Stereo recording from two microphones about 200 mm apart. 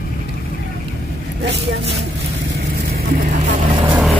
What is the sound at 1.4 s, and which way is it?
Speech, 60° right (ahead or behind).